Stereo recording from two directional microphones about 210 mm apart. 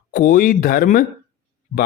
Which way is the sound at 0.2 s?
45° left (ahead or behind).